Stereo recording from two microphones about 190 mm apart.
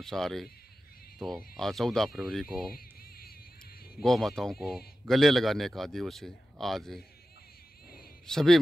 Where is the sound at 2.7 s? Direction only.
50° left (ahead or behind).